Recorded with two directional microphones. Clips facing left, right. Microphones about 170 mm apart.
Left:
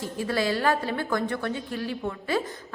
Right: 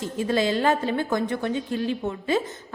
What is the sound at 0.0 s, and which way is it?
A woman's voice, 20° right (ahead or behind).